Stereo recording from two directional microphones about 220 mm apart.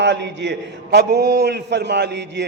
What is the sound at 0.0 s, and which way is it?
A man's voice, 55° right (ahead or behind).